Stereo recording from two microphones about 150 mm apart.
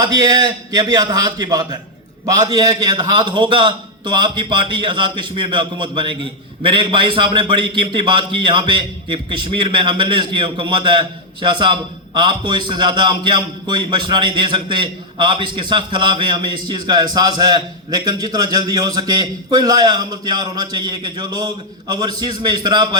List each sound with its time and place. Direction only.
0.0 s a man's voice: 25° right (ahead or behind)